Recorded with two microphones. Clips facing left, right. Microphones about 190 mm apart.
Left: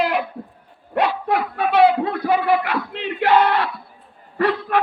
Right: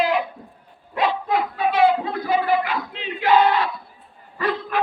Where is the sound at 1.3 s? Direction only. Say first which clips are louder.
Left 1 dB; 65° left (ahead or behind).